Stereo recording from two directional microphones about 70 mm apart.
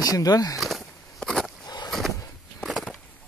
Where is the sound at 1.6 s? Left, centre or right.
Left.